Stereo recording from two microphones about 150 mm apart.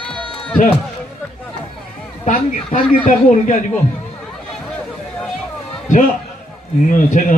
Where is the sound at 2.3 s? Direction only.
55° left (ahead or behind).